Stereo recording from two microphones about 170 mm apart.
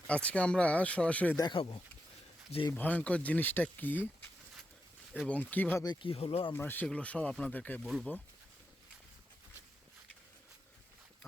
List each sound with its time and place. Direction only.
0.1 s speech: 5° left (ahead or behind)
1.4 s speech: 30° left (ahead or behind)
2.7 s speech: 10° left (ahead or behind)
5.3 s speech: 10° left (ahead or behind)
5.8 s speech: 25° left (ahead or behind)
6.5 s speech: 10° left (ahead or behind)